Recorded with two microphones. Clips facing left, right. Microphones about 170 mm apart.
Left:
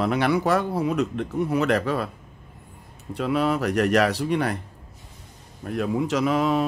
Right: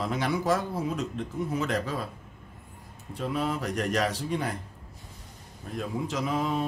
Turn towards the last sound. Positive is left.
turn(degrees=75)  # may be behind; listen again after turning